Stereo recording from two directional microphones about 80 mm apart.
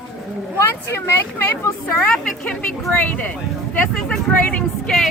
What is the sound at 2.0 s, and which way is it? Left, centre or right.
A woman's voice, centre.